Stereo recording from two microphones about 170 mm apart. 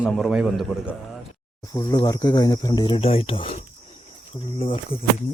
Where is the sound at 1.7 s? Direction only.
20° left (ahead or behind).